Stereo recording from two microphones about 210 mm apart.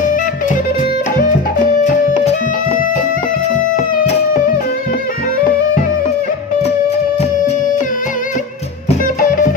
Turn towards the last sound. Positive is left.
turn(degrees=30)  # may be behind; listen again after turning